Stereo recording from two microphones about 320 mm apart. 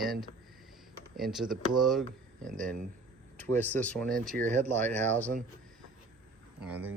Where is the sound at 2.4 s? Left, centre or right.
Right.